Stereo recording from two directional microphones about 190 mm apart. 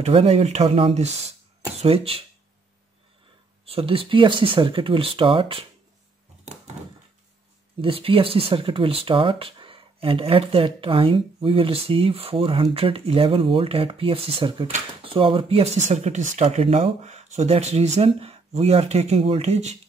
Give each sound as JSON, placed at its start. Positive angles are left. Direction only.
{"t": 0.0, "sound": "speech", "side_deg": -35}
{"t": 3.6, "sound": "speech", "side_deg": -30}
{"t": 7.8, "sound": "speech", "side_deg": -30}